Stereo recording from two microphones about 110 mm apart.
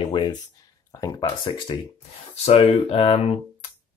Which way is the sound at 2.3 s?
70° left (ahead or behind).